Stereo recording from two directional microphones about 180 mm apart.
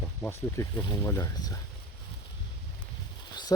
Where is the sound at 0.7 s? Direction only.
25° left (ahead or behind).